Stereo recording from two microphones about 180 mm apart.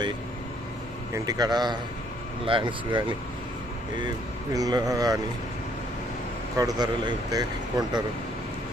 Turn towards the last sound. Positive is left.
turn(degrees=-20)  # may be behind; listen again after turning